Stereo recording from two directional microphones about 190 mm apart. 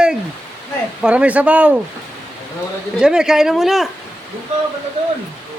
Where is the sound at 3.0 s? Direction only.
5° right (ahead or behind).